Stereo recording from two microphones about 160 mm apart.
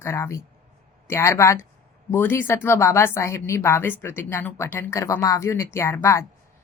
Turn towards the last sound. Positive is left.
turn(degrees=15)  # may be behind; listen again after turning